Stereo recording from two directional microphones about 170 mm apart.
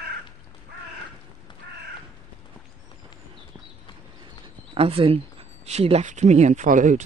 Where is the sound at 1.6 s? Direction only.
90° right.